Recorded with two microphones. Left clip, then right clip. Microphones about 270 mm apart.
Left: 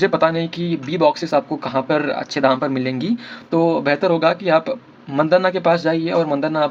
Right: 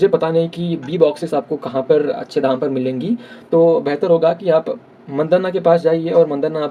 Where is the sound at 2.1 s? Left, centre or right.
Left.